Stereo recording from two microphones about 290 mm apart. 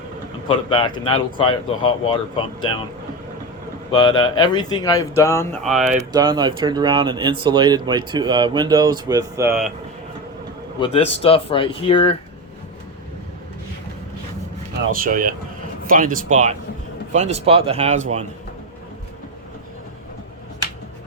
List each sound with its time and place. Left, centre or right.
0.7 s speech: centre
3.9 s speech: centre
6.0 s speech: centre
10.8 s speech: centre
14.8 s speech: right